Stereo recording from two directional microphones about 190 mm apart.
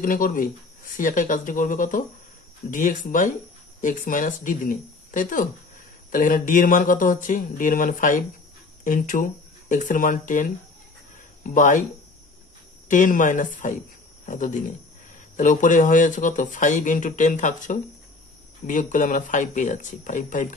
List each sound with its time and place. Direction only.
0.0 s speech: 45° left (ahead or behind)
12.8 s speech: 40° left (ahead or behind)